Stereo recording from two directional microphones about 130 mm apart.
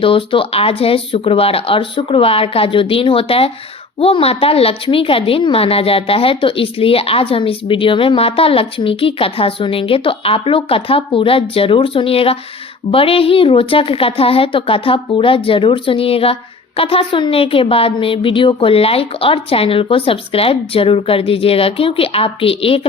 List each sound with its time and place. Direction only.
0.0 s a woman's voice: 45° left (ahead or behind)